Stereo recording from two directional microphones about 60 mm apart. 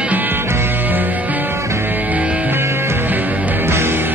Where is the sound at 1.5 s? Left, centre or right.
Right.